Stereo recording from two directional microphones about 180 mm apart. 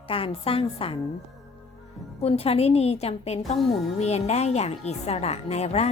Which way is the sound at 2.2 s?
35° left (ahead or behind).